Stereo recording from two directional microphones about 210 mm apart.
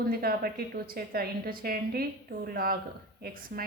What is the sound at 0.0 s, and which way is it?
A woman's voice, 45° right (ahead or behind).